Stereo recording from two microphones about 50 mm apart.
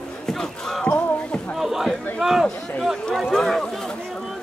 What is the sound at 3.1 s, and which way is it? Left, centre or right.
Speech, centre.